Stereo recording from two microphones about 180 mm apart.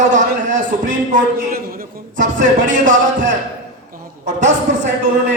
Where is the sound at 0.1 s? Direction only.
45° right (ahead or behind).